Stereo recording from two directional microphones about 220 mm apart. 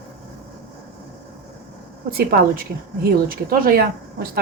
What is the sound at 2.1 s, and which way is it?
A woman's voice, 40° right (ahead or behind).